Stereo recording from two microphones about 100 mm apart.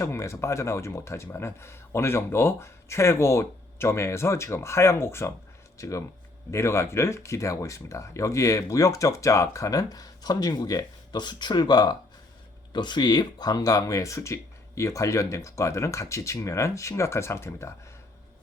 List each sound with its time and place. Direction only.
0.0 s speech: 30° left (ahead or behind)